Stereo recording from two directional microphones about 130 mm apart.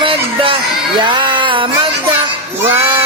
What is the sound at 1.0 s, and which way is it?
Music, 40° right (ahead or behind).